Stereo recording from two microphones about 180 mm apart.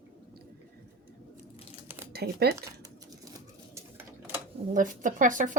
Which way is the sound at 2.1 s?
60° right (ahead or behind).